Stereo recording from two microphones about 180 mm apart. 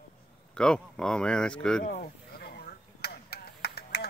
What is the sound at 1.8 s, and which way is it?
Speech, 40° left (ahead or behind).